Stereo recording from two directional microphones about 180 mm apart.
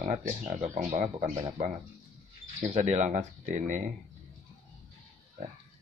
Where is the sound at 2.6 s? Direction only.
40° right (ahead or behind).